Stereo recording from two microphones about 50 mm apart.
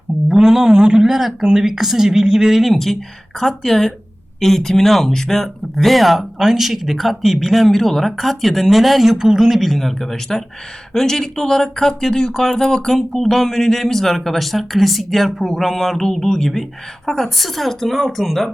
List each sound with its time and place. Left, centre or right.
0.3 s speech: centre